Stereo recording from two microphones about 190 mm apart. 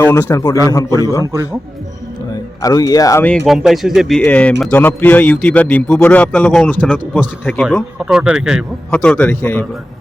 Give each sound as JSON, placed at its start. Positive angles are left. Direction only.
{"t": 0.0, "sound": "speech", "side_deg": 10}
{"t": 2.3, "sound": "speech", "side_deg": 20}
{"t": 7.9, "sound": "speech", "side_deg": -5}
{"t": 8.9, "sound": "speech", "side_deg": 5}